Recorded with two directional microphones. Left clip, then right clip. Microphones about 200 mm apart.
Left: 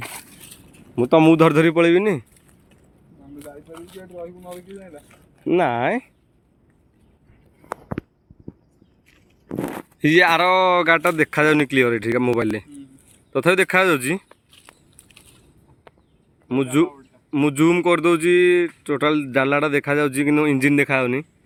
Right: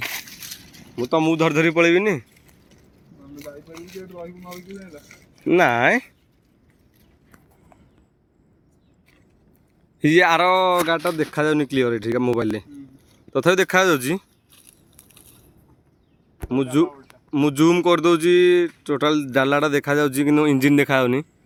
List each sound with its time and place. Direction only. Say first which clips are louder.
0.0 s crushing: right 6 dB; centre (ahead or behind)
0.9 s a man's voice: left 6 dB; 45° left (ahead or behind)
1.4 s a man's voice: left 4 dB; 30° left (ahead or behind)
1.6 s a man's voice: left 1 dB; 15° left (ahead or behind)
3.3 s a sound: even; 30° right (ahead or behind)
5.4 s a man's voice: right 3 dB; centre (ahead or behind)
10.0 s a man's voice: even; 5° right (ahead or behind)
13.3 s biting: even; 5° right (ahead or behind)
16.5 s a man's voice: left 1 dB; centre (ahead or behind)